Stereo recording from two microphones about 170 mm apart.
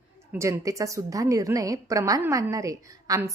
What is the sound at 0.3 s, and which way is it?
A woman's voice, 15° right (ahead or behind).